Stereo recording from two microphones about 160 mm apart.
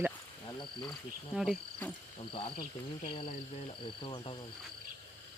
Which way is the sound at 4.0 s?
30° left (ahead or behind).